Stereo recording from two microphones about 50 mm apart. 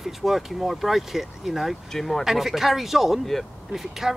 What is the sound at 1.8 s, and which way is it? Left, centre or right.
Speech, centre.